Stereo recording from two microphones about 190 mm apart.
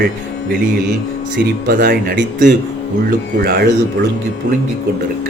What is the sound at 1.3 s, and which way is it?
Speech, 45° right (ahead or behind).